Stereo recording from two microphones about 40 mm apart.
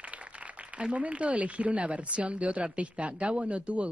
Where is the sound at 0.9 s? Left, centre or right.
Right.